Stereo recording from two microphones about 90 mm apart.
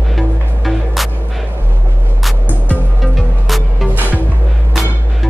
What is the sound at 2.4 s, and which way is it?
Music, 20° left (ahead or behind).